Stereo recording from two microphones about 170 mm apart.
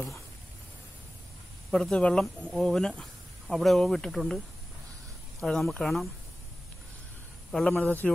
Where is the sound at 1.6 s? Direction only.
5° left (ahead or behind).